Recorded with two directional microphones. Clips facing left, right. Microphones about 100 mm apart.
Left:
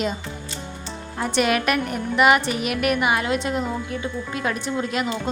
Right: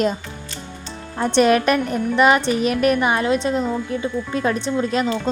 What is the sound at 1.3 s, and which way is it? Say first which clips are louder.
A woman's voice: right 6 dB; 30° right (ahead or behind).